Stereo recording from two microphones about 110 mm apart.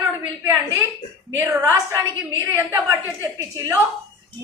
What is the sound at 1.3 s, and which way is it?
A woman's voice, 25° right (ahead or behind).